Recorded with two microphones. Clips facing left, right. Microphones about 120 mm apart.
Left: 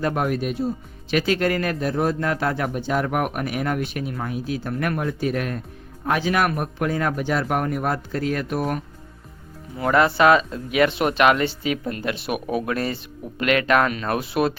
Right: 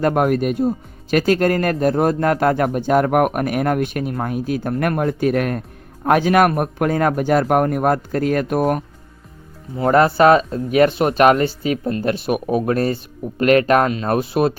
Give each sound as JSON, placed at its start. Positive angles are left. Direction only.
{"t": 0.0, "sound": "a man's voice", "side_deg": -50}
{"t": 9.7, "sound": "speech", "side_deg": -35}